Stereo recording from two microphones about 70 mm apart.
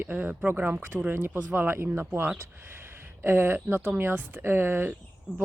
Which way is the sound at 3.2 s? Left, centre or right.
Right.